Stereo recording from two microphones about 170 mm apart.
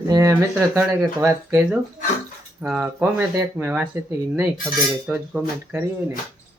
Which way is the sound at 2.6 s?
10° right (ahead or behind).